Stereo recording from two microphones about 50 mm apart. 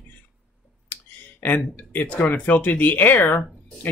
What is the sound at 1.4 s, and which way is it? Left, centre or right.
Speech, left.